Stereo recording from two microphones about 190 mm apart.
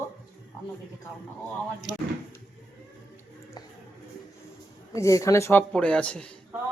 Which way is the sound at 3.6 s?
20° left (ahead or behind).